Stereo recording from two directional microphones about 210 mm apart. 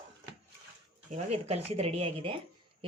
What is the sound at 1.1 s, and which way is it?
Speech, 30° right (ahead or behind).